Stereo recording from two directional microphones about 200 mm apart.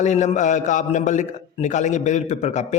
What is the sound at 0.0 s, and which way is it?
A man's voice, 35° left (ahead or behind).